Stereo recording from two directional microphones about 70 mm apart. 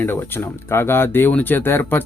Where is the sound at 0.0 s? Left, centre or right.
Left.